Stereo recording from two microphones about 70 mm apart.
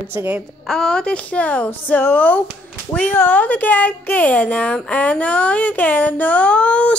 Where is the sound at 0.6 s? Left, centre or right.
Centre.